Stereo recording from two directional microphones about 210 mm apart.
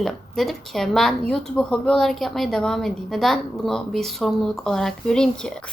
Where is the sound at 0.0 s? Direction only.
Centre (ahead or behind).